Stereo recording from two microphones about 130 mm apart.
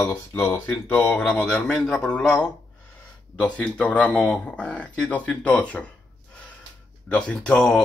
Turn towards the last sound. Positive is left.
turn(degrees=5)  # may be behind; listen again after turning